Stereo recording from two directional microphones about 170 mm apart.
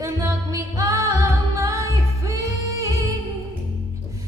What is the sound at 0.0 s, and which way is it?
Music, 20° right (ahead or behind).